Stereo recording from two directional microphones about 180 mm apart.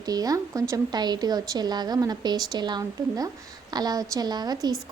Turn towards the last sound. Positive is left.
turn(degrees=-20)  # may be behind; listen again after turning